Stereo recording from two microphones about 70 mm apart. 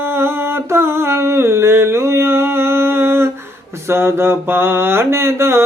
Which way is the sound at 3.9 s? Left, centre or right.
Right.